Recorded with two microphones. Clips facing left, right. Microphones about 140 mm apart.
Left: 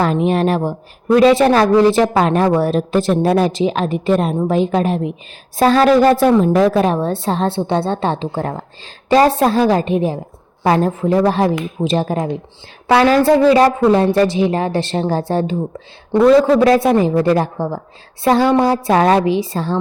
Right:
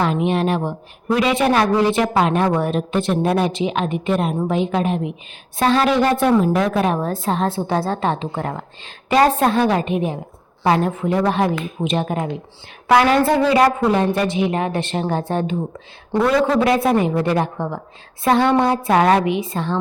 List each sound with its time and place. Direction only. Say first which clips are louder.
0.0 s a woman's voice: left 3 dB; 40° left (ahead or behind)